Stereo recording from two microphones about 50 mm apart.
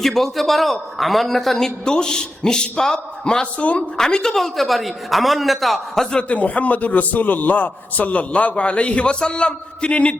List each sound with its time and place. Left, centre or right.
0.0 s a man's voice: centre
3.6 s a man's voice: left
3.9 s a man's voice: centre
6.2 s a man's voice: left